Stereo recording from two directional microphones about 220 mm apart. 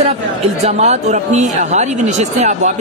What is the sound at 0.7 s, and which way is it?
Speech, 30° right (ahead or behind).